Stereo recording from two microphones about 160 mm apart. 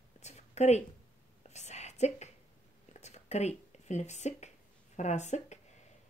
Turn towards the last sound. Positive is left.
turn(degrees=45)  # may be behind; listen again after turning